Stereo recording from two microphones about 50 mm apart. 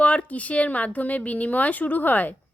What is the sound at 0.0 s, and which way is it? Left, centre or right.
Speech, left.